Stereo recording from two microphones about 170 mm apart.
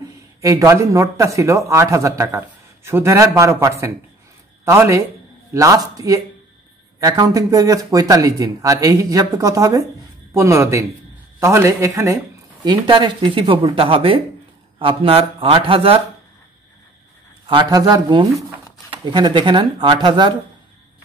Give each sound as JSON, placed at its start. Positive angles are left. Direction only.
{"t": 0.4, "sound": "a man's voice", "side_deg": -20}
{"t": 17.5, "sound": "speech", "side_deg": -25}